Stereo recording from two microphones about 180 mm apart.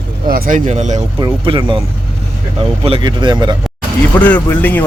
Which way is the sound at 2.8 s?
30° right (ahead or behind).